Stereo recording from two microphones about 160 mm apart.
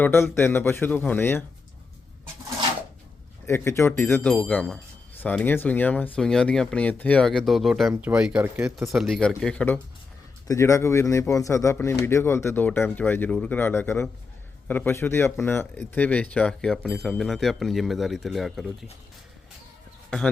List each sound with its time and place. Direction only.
0.0 s speech: 15° left (ahead or behind)
3.4 s speech: 15° left (ahead or behind); by 18.9 s centre (ahead or behind)